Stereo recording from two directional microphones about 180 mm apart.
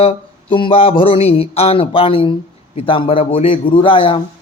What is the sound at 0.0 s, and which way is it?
Speech, 30° left (ahead or behind).